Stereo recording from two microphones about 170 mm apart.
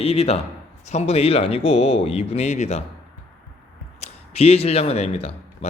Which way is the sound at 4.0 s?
35° left (ahead or behind).